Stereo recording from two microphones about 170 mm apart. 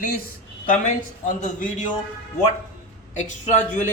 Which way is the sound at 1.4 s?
50° left (ahead or behind).